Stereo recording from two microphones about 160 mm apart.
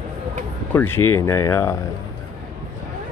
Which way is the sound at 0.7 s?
15° left (ahead or behind).